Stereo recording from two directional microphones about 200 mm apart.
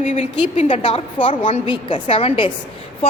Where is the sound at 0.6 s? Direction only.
25° left (ahead or behind).